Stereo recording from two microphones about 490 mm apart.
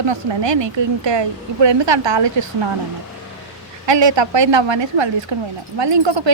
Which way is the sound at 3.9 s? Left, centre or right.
Right.